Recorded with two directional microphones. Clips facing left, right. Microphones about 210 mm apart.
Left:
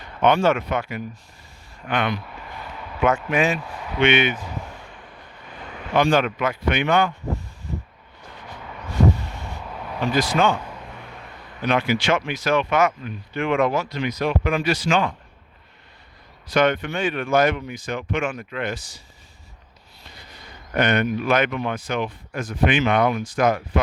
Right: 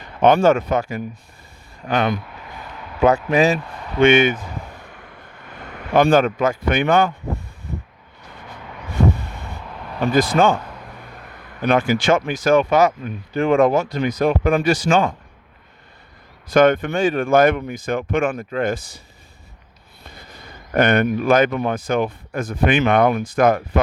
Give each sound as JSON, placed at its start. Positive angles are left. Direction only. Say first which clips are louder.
{"t": 0.2, "sound": "speech", "louder": "right 4 dB", "side_deg": -45}
{"t": 3.6, "sound": "a sound", "louder": "even", "side_deg": 5}
{"t": 3.9, "sound": "speech", "louder": "right 6 dB", "side_deg": -45}
{"t": 5.9, "sound": "speech", "louder": "right 4 dB", "side_deg": -50}
{"t": 8.9, "sound": "vehicle", "louder": "right 1 dB", "side_deg": -55}
{"t": 9.7, "sound": "vehicle", "louder": "left 3 dB", "side_deg": 10}
{"t": 10.0, "sound": "speech", "louder": "right 4 dB", "side_deg": -50}
{"t": 10.6, "sound": "a sound", "louder": "even", "side_deg": 5}
{"t": 11.6, "sound": "speech", "louder": "right 4 dB", "side_deg": -50}
{"t": 16.5, "sound": "speech", "louder": "right 5 dB", "side_deg": -50}
{"t": 20.7, "sound": "speech", "louder": "right 4 dB", "side_deg": -50}